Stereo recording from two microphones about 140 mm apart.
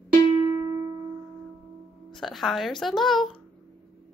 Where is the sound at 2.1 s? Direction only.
Centre (ahead or behind).